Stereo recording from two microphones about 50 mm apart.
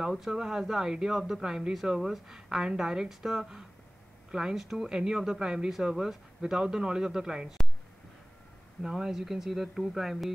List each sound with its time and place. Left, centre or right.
0.0 s a woman's voice: centre
1.7 s a woman's voice: centre
8.8 s a woman's voice: centre